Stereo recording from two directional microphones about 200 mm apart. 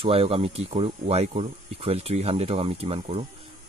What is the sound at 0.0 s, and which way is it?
Speech, 30° right (ahead or behind).